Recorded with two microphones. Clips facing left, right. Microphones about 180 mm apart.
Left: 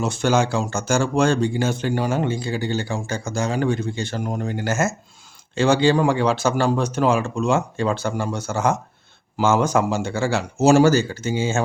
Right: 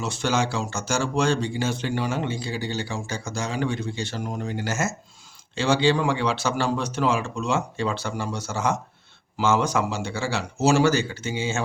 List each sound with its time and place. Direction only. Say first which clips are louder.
0.0 s speech: left 5 dB; 50° left (ahead or behind)